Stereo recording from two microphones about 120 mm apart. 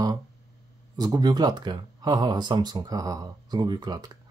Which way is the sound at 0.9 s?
35° right (ahead or behind).